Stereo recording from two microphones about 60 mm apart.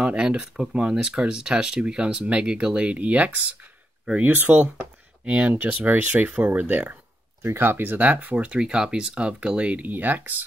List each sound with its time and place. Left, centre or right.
0.0 s speech: centre